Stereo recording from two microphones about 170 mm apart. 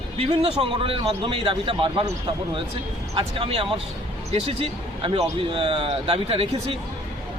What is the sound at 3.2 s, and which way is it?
Speech, 35° right (ahead or behind).